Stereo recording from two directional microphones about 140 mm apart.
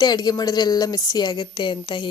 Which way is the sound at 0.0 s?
30° left (ahead or behind).